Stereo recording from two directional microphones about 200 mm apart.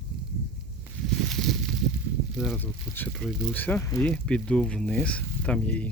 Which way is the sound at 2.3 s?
5° left (ahead or behind).